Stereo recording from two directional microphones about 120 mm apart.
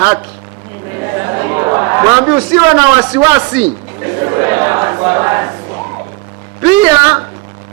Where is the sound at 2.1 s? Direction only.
10° right (ahead or behind).